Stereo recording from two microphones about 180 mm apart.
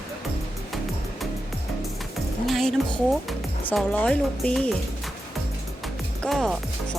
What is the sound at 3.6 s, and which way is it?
Speech, 5° left (ahead or behind).